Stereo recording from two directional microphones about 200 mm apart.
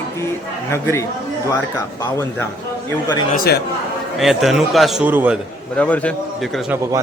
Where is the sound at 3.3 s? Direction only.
50° left (ahead or behind).